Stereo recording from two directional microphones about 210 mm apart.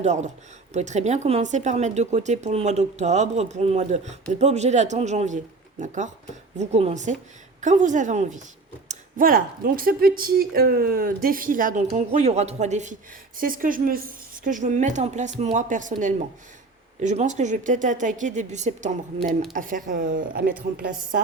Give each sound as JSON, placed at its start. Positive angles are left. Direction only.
{"t": 0.0, "sound": "speech", "side_deg": -35}